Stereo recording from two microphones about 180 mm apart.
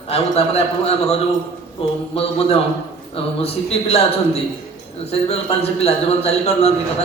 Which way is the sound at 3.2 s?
35° left (ahead or behind).